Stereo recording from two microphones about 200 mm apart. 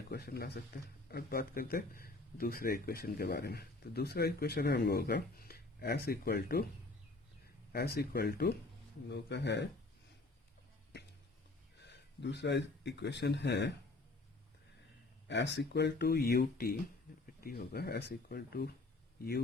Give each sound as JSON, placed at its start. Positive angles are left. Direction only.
{"t": 0.1, "sound": "speech", "side_deg": 50}
{"t": 7.7, "sound": "speech", "side_deg": 50}
{"t": 11.8, "sound": "a man's voice", "side_deg": 60}
{"t": 15.3, "sound": "speech", "side_deg": 60}